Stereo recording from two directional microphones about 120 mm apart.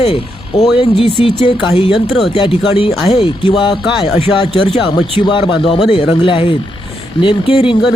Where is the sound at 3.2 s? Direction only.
40° left (ahead or behind).